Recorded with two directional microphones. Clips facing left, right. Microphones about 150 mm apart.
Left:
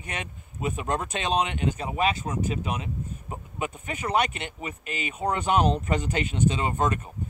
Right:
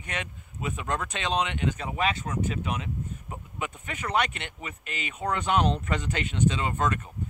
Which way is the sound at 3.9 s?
25° left (ahead or behind).